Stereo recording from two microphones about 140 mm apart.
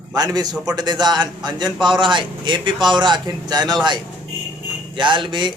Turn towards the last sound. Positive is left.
turn(degrees=-35)  # may be behind; listen again after turning